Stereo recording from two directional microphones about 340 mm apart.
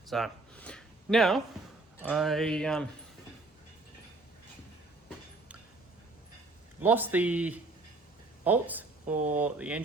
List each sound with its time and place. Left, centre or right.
0.1 s a sound: centre
2.0 s music: centre
6.8 s music: centre
8.4 s speech: centre
9.1 s speech: right
9.4 s music: centre